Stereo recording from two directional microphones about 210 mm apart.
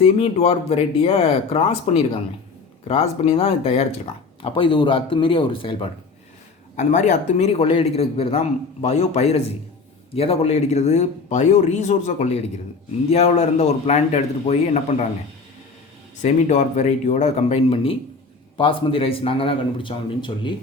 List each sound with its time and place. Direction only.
0.0 s speech: 30° left (ahead or behind)
6.7 s speech: 35° left (ahead or behind)
16.2 s speech: 35° left (ahead or behind)